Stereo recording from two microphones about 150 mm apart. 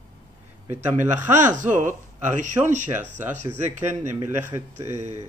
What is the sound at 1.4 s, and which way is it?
Speech, 55° right (ahead or behind).